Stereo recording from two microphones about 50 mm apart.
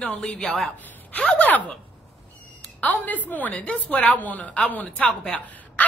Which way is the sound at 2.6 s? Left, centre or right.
Left.